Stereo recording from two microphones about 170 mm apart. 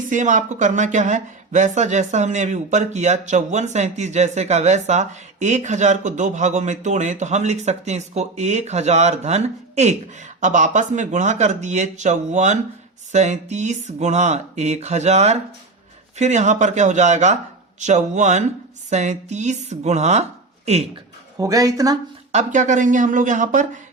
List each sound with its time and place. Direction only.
0.1 s speech: 45° right (ahead or behind)
21.3 s speech: 20° right (ahead or behind)
22.3 s speech: 45° right (ahead or behind)